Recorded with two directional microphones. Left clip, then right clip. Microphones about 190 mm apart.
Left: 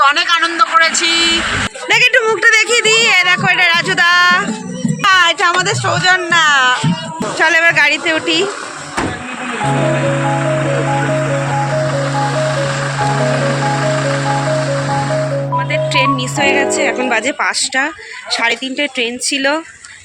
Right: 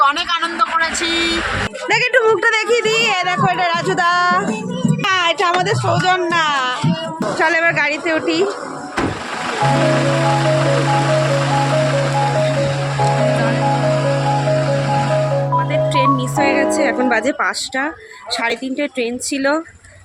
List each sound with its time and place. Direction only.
0.0 s a man's voice: 10° left (ahead or behind)
1.0 s speech: 30° right (ahead or behind)
1.9 s a woman's voice: 15° right (ahead or behind)
3.2 s a sound: 25° right (ahead or behind)
5.0 s speech: 5° left (ahead or behind)
7.3 s speech: centre (ahead or behind)
15.5 s music: 5° right (ahead or behind)
16.7 s speech: 20° right (ahead or behind)
18.3 s speech: 5° right (ahead or behind)